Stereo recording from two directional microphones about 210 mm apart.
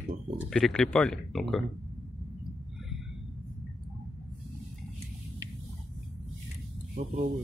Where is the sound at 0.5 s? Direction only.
Centre (ahead or behind).